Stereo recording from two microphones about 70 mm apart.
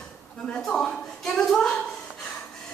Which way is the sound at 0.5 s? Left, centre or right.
Centre.